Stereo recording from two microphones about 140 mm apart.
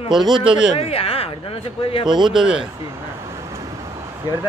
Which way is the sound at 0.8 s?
45° left (ahead or behind).